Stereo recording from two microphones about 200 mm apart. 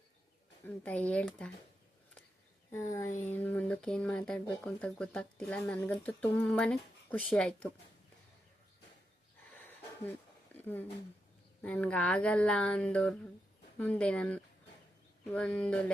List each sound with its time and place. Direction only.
0.6 s speech: 5° left (ahead or behind)
2.7 s speech: 15° left (ahead or behind)
3.1 s a sound: 40° left (ahead or behind)
3.3 s speech: 10° left (ahead or behind)
9.5 s a sound: 10° left (ahead or behind)
11.6 s speech: 5° left (ahead or behind)